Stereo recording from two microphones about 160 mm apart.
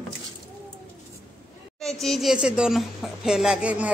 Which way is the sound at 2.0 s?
Centre (ahead or behind).